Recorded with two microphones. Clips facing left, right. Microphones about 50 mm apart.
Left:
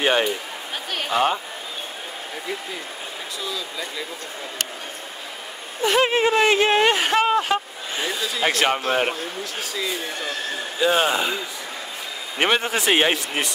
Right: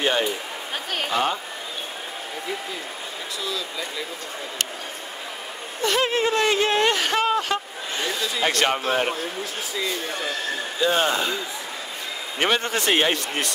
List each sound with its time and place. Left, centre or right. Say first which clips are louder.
0.0 s speech: left 2 dB; left
5.8 s speech: left 3 dB; centre
10.8 s speech: left 2 dB; centre